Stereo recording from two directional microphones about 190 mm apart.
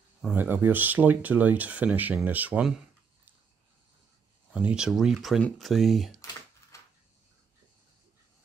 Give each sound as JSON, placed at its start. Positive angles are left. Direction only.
{"t": 0.2, "sound": "speech", "side_deg": -10}
{"t": 4.5, "sound": "speech", "side_deg": -5}
{"t": 6.7, "sound": "a sound", "side_deg": 15}